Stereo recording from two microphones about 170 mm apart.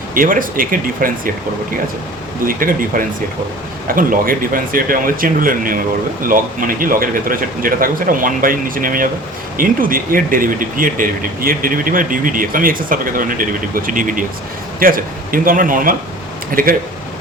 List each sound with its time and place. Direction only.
0.1 s speech: 55° right (ahead or behind)
2.5 s speech: 55° right (ahead or behind)